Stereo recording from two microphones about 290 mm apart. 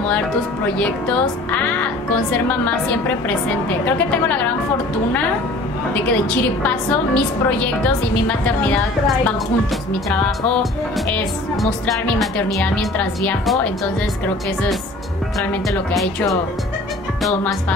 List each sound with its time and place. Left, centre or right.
0.7 s a woman's voice: centre
3.8 s a woman's voice: centre
6.3 s a woman's voice: centre